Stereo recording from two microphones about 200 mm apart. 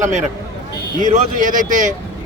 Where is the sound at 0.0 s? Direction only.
35° right (ahead or behind).